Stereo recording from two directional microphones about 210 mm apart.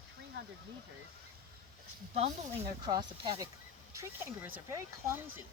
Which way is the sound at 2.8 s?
20° right (ahead or behind).